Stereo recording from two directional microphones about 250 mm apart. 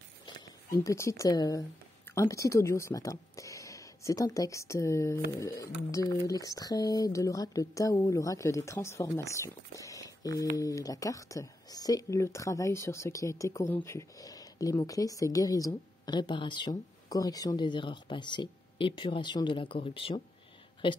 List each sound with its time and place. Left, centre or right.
0.2 s speech: centre